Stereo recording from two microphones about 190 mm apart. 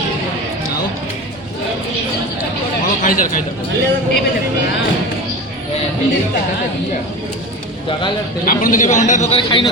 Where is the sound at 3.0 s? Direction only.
45° left (ahead or behind).